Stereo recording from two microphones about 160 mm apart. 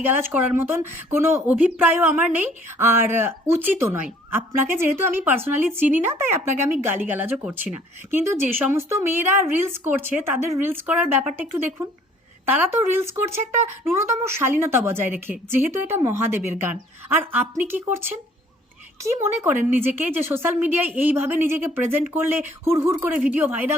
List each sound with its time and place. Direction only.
0.0 s a woman's voice: 10° right (ahead or behind)
19.0 s a woman's voice: 15° right (ahead or behind)